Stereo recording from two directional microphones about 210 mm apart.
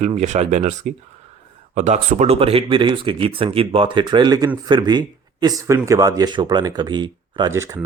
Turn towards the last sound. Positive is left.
turn(degrees=-15)  # may be behind; listen again after turning